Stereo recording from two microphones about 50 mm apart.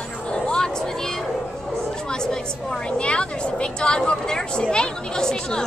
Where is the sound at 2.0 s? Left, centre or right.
Centre.